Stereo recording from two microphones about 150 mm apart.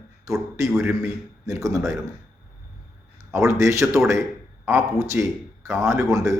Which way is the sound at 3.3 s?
20° right (ahead or behind).